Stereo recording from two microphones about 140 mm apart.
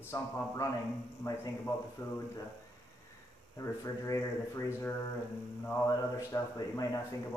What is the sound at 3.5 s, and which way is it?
A man's voice, 25° left (ahead or behind).